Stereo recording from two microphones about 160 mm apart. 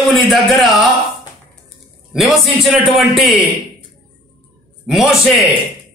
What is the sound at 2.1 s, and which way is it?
Speech, centre (ahead or behind).